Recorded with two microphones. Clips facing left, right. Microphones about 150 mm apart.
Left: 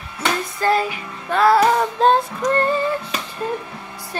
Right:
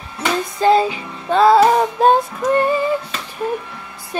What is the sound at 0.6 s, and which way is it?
Music, 25° right (ahead or behind).